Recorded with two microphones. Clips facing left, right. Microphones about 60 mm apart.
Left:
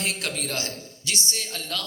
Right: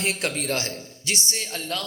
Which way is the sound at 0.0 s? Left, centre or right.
Right.